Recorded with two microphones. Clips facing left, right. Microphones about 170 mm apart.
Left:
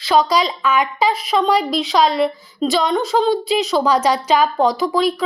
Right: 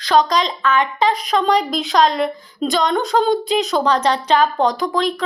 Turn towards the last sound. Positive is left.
turn(degrees=5)  # may be behind; listen again after turning